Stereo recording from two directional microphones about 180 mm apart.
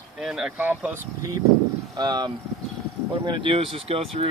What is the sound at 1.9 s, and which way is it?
Speech, 25° right (ahead or behind).